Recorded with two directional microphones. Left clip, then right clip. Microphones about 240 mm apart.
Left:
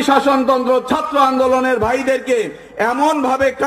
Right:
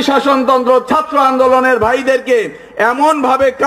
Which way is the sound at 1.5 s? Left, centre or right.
Right.